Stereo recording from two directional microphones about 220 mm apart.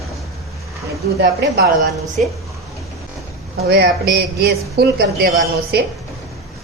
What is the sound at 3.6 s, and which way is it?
Speech, 45° right (ahead or behind).